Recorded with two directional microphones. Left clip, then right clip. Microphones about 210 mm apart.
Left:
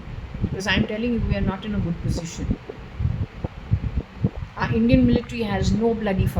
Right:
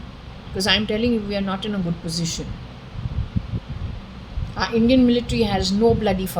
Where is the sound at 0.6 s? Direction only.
20° right (ahead or behind).